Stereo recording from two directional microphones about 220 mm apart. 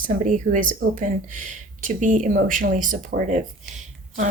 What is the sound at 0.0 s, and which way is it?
Speech, 35° right (ahead or behind).